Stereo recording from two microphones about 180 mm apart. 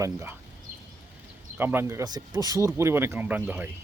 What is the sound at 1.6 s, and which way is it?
Speech, 10° right (ahead or behind).